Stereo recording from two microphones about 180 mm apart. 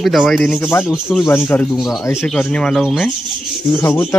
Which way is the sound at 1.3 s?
10° left (ahead or behind).